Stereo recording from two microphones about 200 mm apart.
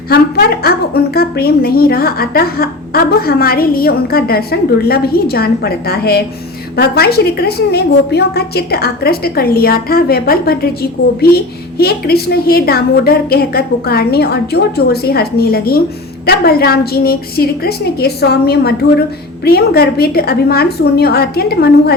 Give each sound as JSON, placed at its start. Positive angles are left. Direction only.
{"t": 0.1, "sound": "a woman's voice", "side_deg": 50}